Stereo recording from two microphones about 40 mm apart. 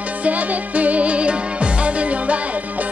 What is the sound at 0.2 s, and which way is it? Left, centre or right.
Music, right.